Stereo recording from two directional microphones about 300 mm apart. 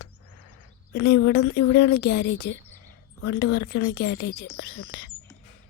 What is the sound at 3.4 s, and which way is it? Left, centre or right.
Speech, left.